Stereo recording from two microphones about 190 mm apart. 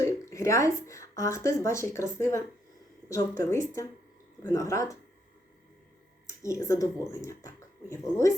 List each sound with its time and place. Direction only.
0.0 s speech: 15° left (ahead or behind)
6.2 s speech: 15° left (ahead or behind)